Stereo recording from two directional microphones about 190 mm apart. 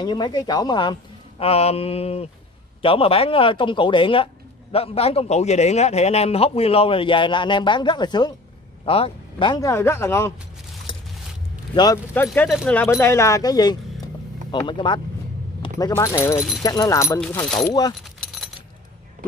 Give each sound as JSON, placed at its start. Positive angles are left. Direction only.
{"t": 0.0, "sound": "a man's voice", "side_deg": 20}
{"t": 10.9, "sound": "vehicle", "side_deg": 25}
{"t": 11.7, "sound": "speech", "side_deg": 20}
{"t": 17.6, "sound": "speech", "side_deg": 20}